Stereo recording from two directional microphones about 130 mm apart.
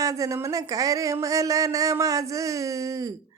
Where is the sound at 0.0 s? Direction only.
25° right (ahead or behind).